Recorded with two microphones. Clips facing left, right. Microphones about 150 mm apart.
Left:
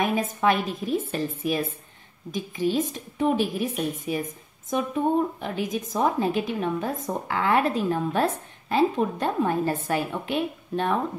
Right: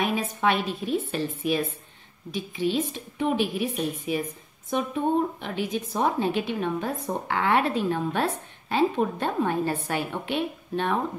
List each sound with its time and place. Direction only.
0.1 s a woman's voice: 40° left (ahead or behind)
5.4 s a woman's voice: 40° left (ahead or behind)